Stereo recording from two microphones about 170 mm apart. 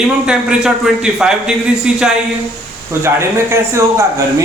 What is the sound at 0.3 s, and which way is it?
A man's voice, 5° right (ahead or behind).